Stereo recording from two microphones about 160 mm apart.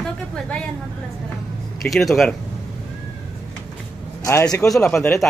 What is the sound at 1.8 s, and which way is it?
Speech, centre (ahead or behind).